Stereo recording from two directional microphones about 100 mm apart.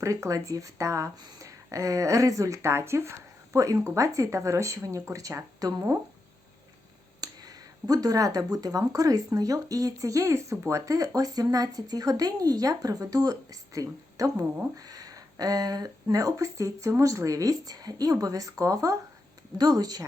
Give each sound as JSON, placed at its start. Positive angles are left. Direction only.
{"t": 0.0, "sound": "speech", "side_deg": -30}
{"t": 7.2, "sound": "speech", "side_deg": -40}